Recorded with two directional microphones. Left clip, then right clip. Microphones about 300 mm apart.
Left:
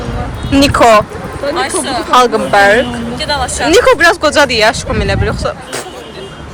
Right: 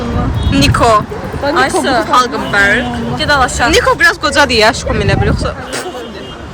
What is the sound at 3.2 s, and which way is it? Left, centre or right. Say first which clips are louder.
Speech: right 5 dB; right.